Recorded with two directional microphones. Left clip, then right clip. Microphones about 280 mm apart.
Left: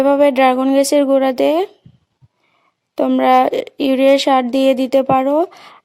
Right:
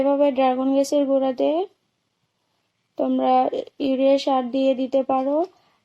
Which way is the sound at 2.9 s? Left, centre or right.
Left.